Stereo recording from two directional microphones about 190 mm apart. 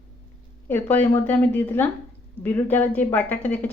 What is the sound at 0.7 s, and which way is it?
Speech, 10° left (ahead or behind).